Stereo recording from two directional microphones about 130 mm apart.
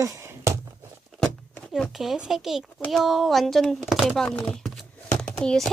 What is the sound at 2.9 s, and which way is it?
Speech, centre (ahead or behind).